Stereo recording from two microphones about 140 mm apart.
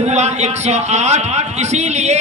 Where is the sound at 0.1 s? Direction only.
55° right (ahead or behind).